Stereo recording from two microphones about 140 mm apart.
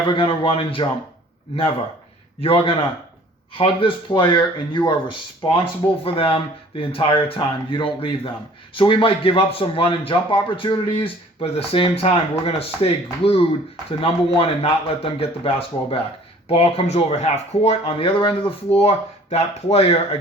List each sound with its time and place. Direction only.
0.1 s speech: 35° left (ahead or behind)
2.4 s a man's voice: 40° left (ahead or behind)